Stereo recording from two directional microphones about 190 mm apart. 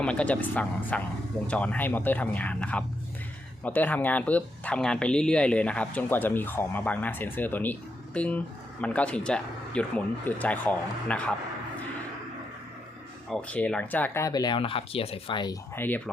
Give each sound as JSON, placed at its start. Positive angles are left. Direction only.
{"t": 0.0, "sound": "speech", "side_deg": 5}
{"t": 13.3, "sound": "speech", "side_deg": 5}
{"t": 15.7, "sound": "speech", "side_deg": 10}